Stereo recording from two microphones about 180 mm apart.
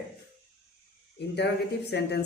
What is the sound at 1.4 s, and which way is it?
Speech, 70° left (ahead or behind).